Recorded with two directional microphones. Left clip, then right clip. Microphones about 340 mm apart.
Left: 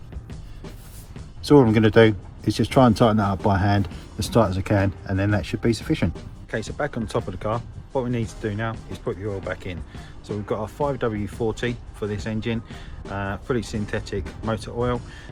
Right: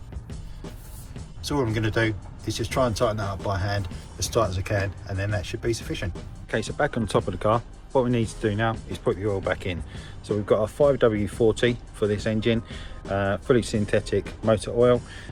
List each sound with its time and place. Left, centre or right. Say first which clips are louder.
1.4 s speech: left 10 dB; centre
6.5 s speech: right 2 dB; centre